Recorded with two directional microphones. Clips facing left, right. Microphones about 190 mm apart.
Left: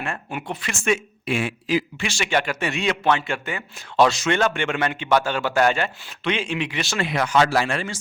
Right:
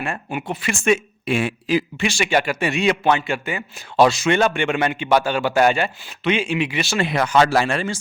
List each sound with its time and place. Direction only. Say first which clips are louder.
0.0 s speech: right 3 dB; 10° right (ahead or behind)
1.4 s speech: right 2 dB; 60° right (ahead or behind)
2.0 s speech: right 4 dB; 15° right (ahead or behind)
6.9 s speech: right 2 dB; 30° right (ahead or behind)